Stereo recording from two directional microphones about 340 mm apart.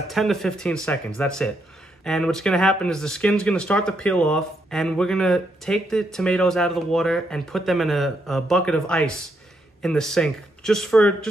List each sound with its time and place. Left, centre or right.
0.1 s speech: centre